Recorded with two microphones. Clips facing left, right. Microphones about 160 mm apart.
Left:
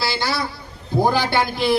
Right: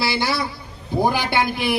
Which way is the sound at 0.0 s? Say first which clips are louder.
Right 1 dB; 20° right (ahead or behind).